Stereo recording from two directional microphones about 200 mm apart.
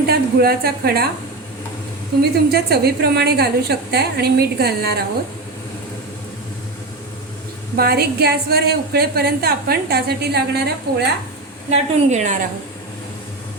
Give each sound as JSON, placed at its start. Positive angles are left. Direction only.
{"t": 0.1, "sound": "a woman's voice", "side_deg": -50}
{"t": 2.5, "sound": "a woman's voice", "side_deg": -55}
{"t": 7.8, "sound": "a woman's voice", "side_deg": -50}
{"t": 11.7, "sound": "a woman's voice", "side_deg": -35}